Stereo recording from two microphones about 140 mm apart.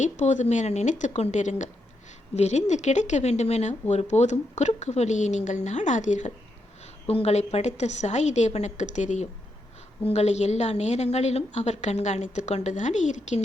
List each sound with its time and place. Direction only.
0.0 s speech: 60° left (ahead or behind)
7.1 s a woman's voice: 50° left (ahead or behind)